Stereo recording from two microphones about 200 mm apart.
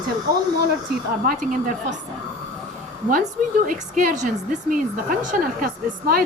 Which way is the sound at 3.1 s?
40° right (ahead or behind).